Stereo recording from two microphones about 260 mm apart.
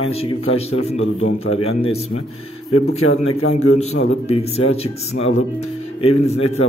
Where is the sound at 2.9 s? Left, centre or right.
Left.